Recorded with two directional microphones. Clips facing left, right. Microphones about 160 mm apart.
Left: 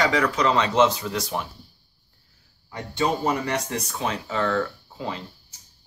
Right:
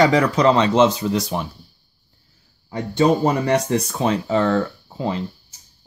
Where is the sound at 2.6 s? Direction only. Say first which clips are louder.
Right 8 dB; 35° right (ahead or behind).